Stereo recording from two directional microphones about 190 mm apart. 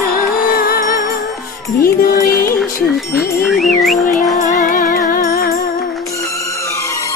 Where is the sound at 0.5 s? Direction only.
50° left (ahead or behind).